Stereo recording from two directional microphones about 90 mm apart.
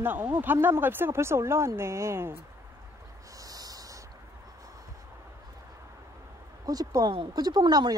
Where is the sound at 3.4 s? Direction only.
45° right (ahead or behind).